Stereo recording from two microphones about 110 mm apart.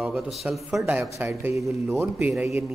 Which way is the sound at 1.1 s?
20° right (ahead or behind).